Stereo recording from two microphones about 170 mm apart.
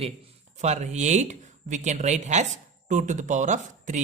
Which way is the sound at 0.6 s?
45° right (ahead or behind).